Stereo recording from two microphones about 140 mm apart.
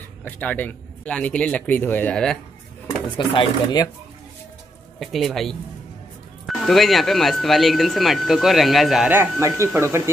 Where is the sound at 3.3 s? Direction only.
30° left (ahead or behind).